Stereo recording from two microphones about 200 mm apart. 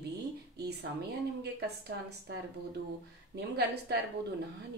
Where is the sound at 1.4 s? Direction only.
55° right (ahead or behind).